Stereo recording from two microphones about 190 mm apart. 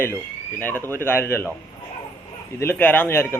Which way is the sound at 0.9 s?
10° left (ahead or behind).